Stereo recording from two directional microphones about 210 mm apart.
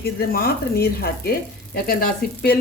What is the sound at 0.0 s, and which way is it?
Speech, 45° left (ahead or behind).